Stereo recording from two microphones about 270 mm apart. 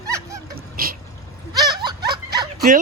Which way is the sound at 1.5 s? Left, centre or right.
Centre.